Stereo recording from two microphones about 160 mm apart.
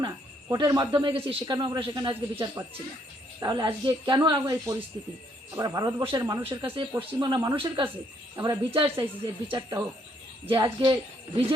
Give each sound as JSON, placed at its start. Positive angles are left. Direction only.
{"t": 0.5, "sound": "a man's voice", "side_deg": -25}